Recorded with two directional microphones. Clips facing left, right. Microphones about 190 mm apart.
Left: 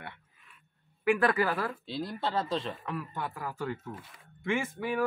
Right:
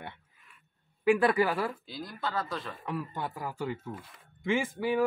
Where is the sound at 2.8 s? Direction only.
15° right (ahead or behind).